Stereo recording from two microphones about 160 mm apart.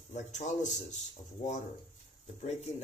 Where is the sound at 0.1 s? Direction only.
45° left (ahead or behind).